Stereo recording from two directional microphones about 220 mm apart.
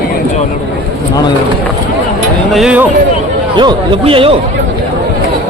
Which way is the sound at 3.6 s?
20° right (ahead or behind).